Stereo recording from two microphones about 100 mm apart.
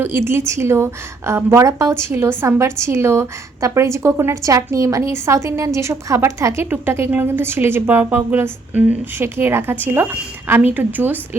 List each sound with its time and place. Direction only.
0.0 s a woman's voice: 25° right (ahead or behind)